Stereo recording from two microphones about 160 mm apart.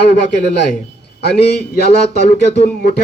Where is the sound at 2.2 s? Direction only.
45° left (ahead or behind).